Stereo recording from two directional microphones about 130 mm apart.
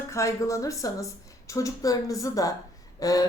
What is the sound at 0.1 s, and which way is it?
Speech, 20° left (ahead or behind).